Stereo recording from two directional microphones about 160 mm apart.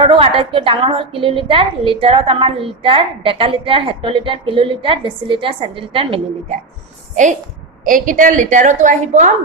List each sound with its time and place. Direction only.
0.0 s a woman's voice: 35° right (ahead or behind)
7.9 s a woman's voice: 55° right (ahead or behind)